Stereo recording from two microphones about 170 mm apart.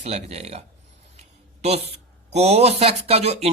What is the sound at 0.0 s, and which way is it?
Speech, 40° right (ahead or behind).